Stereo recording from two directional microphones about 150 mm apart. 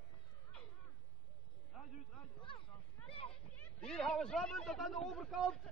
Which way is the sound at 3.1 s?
40° left (ahead or behind).